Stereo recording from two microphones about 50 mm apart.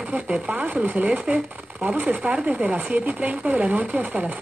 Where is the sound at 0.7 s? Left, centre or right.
Right.